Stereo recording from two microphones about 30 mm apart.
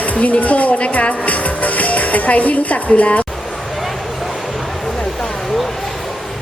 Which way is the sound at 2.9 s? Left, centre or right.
Left.